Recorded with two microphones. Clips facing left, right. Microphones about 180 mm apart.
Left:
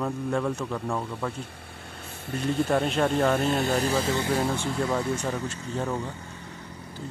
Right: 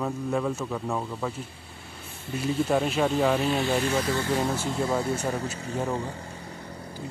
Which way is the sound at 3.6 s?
35° left (ahead or behind).